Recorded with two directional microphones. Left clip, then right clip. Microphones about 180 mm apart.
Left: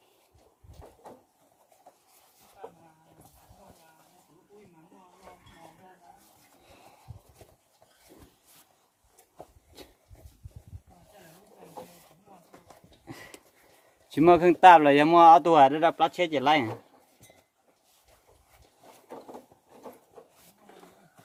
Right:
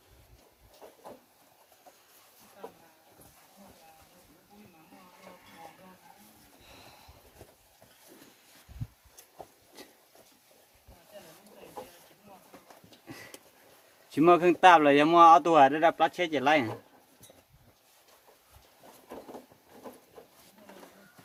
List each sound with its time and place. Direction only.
14.1 s speech: 35° left (ahead or behind)